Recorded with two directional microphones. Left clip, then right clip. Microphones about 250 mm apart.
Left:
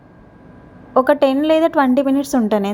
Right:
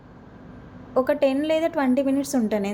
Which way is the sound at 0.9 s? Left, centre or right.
Centre.